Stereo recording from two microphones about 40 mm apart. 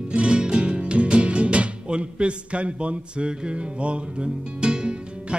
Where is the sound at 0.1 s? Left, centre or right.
Right.